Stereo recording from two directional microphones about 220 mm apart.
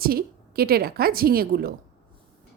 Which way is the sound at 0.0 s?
45° right (ahead or behind).